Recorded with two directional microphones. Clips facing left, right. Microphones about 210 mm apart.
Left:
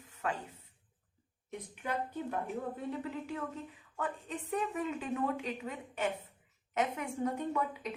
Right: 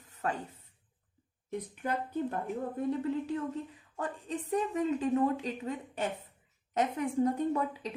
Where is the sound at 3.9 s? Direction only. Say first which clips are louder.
Right 2 dB; 35° right (ahead or behind).